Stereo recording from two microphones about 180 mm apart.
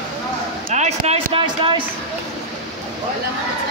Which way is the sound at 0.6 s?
40° right (ahead or behind).